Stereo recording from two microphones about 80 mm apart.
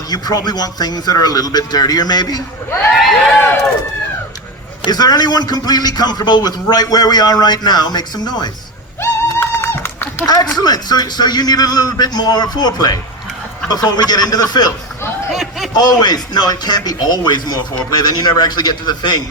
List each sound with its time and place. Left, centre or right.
0.1 s a man's voice: left
2.9 s speech: centre
4.8 s a man's voice: left
9.4 s a sound: left
10.2 s a man's voice: left
15.3 s a sound: centre
15.7 s a man's voice: left